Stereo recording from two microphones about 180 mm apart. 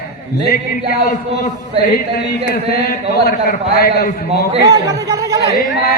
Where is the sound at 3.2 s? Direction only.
55° left (ahead or behind).